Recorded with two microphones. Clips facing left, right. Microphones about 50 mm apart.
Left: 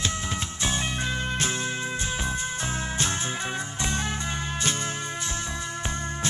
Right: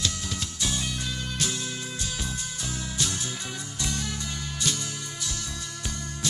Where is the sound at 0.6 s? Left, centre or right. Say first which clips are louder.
Left 3 dB; left.